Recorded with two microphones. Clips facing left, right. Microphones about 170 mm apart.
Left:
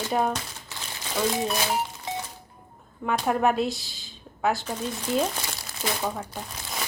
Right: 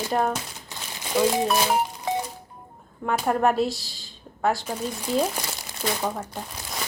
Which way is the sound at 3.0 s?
Centre (ahead or behind).